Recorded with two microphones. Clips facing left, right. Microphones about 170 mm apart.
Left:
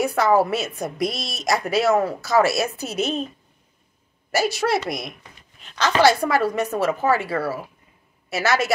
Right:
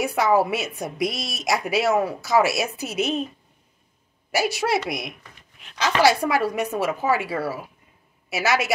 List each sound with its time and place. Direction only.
0.0 s a woman's voice: 10° right (ahead or behind)
4.3 s a woman's voice: 10° right (ahead or behind)